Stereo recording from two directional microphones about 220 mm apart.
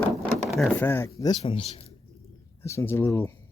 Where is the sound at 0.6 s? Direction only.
10° left (ahead or behind); by 1.9 s 25° left (ahead or behind).